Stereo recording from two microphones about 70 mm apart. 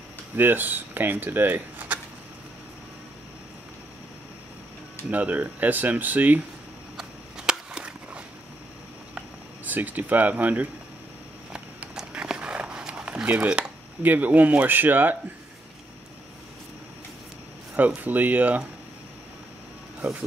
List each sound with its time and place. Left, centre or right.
0.4 s speech: right
5.1 s speech: right
7.0 s a sound: centre
9.7 s speech: right
11.5 s a sound: centre; by 15.1 s right
17.7 s speech: right
20.0 s speech: centre